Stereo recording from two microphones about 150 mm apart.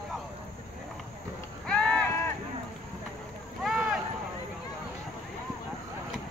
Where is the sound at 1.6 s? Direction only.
5° left (ahead or behind).